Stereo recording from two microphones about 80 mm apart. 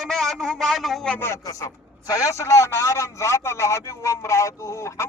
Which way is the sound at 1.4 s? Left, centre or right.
Left.